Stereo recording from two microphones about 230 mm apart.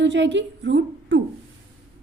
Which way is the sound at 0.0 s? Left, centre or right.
Right.